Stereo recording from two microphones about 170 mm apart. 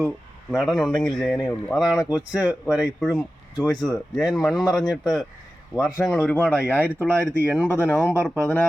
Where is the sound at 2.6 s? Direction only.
20° left (ahead or behind).